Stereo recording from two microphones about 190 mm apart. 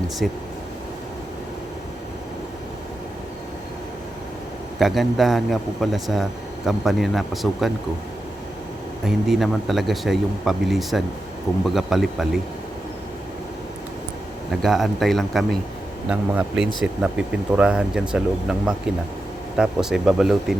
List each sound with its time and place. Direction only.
0.2 s speech: centre (ahead or behind)
4.8 s speech: centre (ahead or behind)
9.0 s speech: centre (ahead or behind)
14.5 s speech: centre (ahead or behind)